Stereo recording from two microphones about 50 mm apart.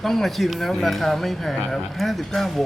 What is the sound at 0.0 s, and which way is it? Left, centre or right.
Speech, centre.